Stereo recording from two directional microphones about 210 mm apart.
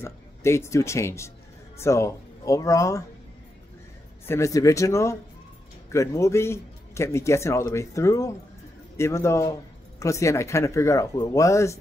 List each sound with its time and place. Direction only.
0.0 s speech: 10° left (ahead or behind)
4.3 s speech: 15° left (ahead or behind)